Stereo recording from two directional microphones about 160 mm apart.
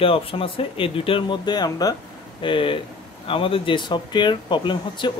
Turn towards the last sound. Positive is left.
turn(degrees=30)  # may be behind; listen again after turning